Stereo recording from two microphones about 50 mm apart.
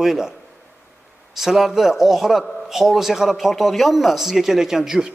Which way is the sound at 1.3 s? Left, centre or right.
Centre.